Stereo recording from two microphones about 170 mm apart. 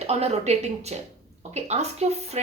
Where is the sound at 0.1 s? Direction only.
40° right (ahead or behind).